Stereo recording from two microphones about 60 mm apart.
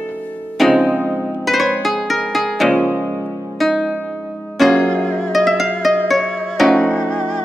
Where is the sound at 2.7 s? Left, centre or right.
Left.